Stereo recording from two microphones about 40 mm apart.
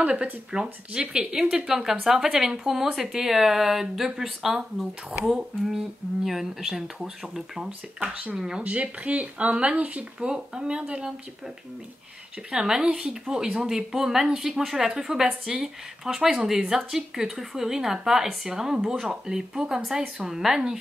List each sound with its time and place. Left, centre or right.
0.0 s speech: right
8.0 s speech: right
8.4 s speech: centre
8.6 s speech: right
10.2 s speech: centre
12.4 s speech: centre